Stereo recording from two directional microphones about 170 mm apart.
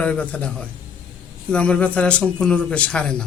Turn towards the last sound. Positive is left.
turn(degrees=5)  # may be behind; listen again after turning